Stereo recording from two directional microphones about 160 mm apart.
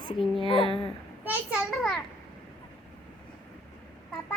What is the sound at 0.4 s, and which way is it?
Speech, 30° left (ahead or behind).